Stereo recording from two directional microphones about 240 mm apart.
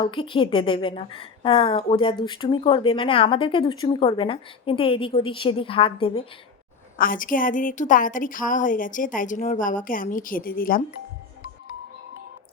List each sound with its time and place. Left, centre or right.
0.0 s a woman's voice: left
7.0 s a woman's voice: left